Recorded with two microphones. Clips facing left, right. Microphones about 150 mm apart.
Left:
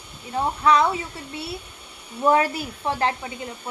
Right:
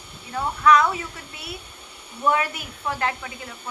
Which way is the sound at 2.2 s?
35° left (ahead or behind).